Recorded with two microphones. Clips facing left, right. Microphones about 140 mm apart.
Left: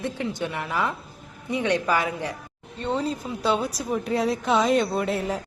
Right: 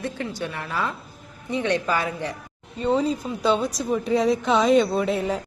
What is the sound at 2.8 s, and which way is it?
A woman's voice, centre (ahead or behind).